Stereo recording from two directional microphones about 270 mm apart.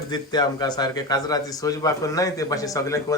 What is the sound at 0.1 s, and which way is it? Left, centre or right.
A man's voice, centre.